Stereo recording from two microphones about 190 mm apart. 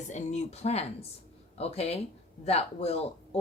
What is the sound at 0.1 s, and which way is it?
Speech, 35° left (ahead or behind).